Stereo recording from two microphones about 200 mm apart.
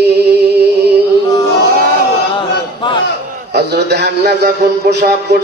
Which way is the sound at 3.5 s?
55° right (ahead or behind).